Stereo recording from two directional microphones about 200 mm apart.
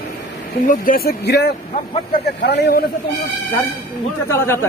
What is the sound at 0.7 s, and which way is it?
A man's voice, 45° left (ahead or behind).